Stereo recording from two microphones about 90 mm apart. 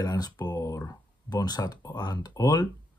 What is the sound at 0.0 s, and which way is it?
Speech, 45° left (ahead or behind).